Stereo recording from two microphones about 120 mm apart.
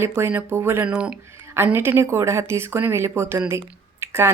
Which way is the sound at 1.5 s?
20° right (ahead or behind).